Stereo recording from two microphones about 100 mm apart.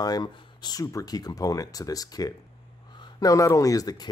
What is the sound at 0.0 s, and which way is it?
Speech, 40° left (ahead or behind).